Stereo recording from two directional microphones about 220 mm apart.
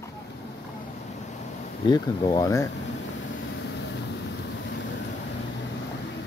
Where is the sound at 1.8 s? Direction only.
20° left (ahead or behind).